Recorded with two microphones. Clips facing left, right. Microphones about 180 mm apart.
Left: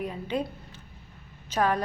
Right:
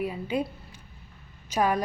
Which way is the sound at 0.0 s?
10° right (ahead or behind).